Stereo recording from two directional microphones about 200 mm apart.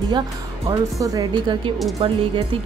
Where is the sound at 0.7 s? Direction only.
15° right (ahead or behind).